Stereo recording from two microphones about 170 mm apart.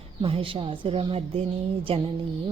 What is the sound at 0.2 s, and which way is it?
A woman's voice, 35° right (ahead or behind).